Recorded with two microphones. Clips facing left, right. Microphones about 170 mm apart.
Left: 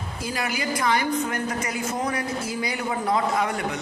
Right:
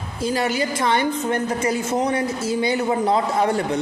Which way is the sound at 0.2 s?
25° right (ahead or behind).